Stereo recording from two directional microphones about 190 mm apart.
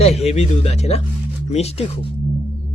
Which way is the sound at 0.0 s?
35° left (ahead or behind).